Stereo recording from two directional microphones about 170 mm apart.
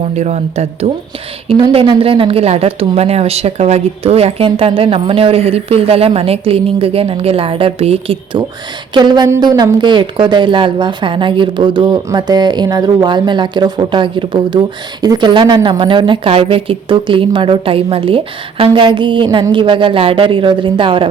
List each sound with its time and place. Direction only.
0.2 s a woman's voice: 40° right (ahead or behind)